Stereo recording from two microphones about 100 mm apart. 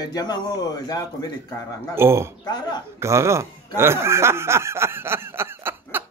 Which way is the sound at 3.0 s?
30° right (ahead or behind).